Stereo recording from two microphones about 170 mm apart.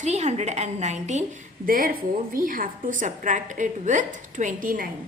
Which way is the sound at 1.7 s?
55° right (ahead or behind).